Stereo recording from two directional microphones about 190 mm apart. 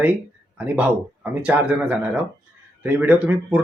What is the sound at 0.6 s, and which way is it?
Speech, 10° right (ahead or behind).